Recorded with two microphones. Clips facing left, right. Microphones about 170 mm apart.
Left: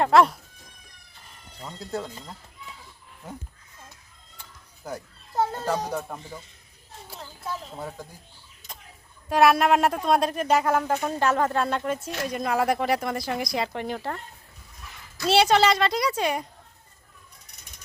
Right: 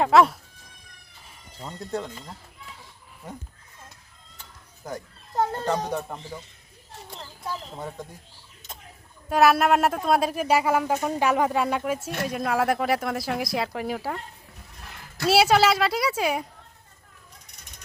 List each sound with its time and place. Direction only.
0.0 s speech: centre (ahead or behind)
1.2 s a sound: centre (ahead or behind)
4.9 s speech: 5° left (ahead or behind)
9.3 s speech: centre (ahead or behind)
14.8 s a sound: 65° right (ahead or behind)
15.3 s speech: 5° right (ahead or behind)